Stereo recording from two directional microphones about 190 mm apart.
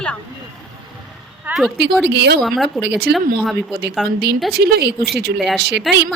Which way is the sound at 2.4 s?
Centre (ahead or behind).